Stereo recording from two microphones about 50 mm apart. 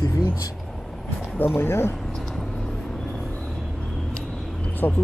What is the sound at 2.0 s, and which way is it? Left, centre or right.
Vehicle, centre.